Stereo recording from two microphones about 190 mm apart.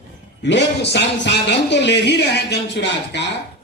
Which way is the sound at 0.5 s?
65° left (ahead or behind).